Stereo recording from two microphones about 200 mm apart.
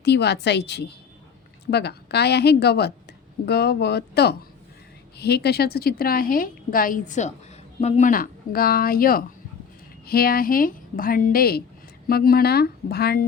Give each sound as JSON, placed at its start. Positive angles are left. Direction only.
{"t": 0.0, "sound": "a woman's voice", "side_deg": 55}